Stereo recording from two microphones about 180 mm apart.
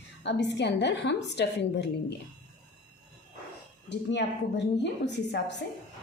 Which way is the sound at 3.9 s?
75° left (ahead or behind).